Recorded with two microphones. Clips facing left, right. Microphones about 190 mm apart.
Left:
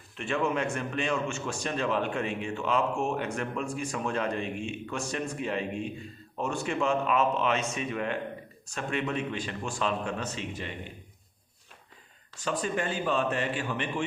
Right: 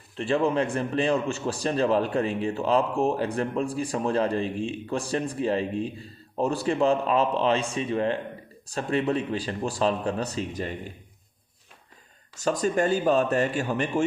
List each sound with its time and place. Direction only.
0.2 s a man's voice: 35° right (ahead or behind)
12.4 s a man's voice: 40° right (ahead or behind)